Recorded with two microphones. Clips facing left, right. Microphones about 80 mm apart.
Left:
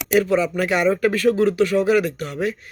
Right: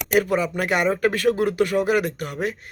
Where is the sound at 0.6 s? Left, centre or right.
Right.